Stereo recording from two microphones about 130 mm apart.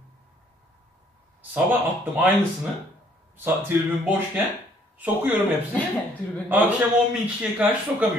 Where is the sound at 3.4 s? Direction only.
15° right (ahead or behind).